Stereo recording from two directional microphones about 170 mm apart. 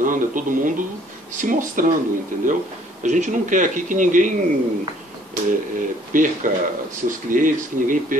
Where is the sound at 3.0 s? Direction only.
45° right (ahead or behind).